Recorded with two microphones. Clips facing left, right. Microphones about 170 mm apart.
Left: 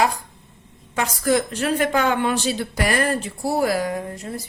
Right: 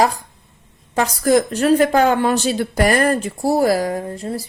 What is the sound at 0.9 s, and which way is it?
A woman's voice, 40° right (ahead or behind).